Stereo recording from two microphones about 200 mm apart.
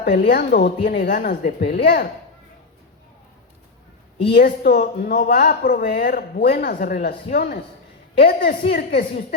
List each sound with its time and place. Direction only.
0.1 s speech: 50° left (ahead or behind)
4.3 s speech: 50° left (ahead or behind)